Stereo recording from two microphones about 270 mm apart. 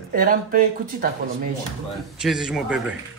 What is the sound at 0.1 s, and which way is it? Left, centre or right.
Speech, right.